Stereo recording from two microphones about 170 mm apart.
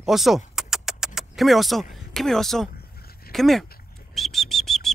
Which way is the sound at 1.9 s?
Centre (ahead or behind).